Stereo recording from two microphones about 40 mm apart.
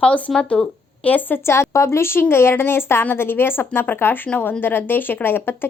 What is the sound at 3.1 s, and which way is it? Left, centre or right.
A woman's voice, left.